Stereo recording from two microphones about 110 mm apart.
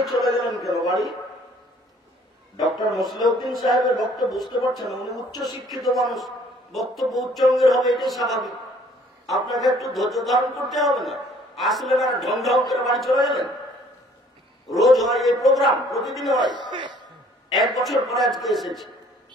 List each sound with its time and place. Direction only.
0.0 s a man's voice: centre (ahead or behind)
2.6 s a man's voice: centre (ahead or behind)
3.1 s speech: 40° left (ahead or behind)
3.7 s a man's voice: centre (ahead or behind)
14.7 s a man's voice: centre (ahead or behind)
16.3 s speech: 40° right (ahead or behind)
17.5 s a man's voice: centre (ahead or behind)